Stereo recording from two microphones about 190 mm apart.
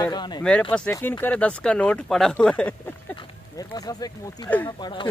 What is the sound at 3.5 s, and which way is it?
Speech, 20° left (ahead or behind).